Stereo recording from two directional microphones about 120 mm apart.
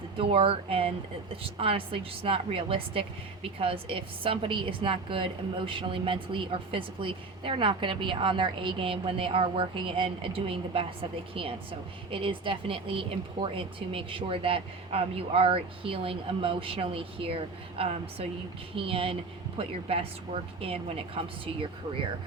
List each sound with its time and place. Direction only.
0.2 s speech: 50° right (ahead or behind)